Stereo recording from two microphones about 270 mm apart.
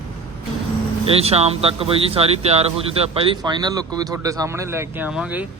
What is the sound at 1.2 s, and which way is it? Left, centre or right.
A man's voice, right.